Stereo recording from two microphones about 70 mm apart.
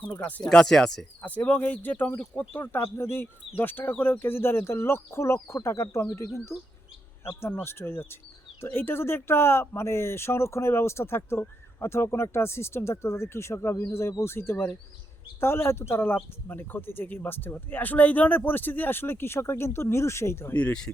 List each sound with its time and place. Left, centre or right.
0.1 s speech: left
0.4 s speech: centre
1.2 s speech: left
2.5 s speech: left
7.6 s speech: left
20.5 s speech: left